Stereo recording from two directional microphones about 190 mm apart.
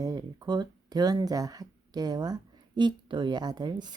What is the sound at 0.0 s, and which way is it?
A woman's voice, 20° right (ahead or behind).